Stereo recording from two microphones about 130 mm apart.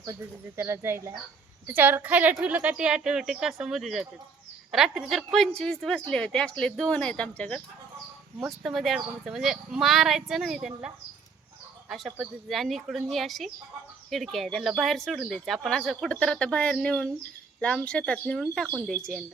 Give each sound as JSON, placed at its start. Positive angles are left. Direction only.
{"t": 0.0, "sound": "a woman's voice", "side_deg": -20}
{"t": 8.4, "sound": "speech", "side_deg": 0}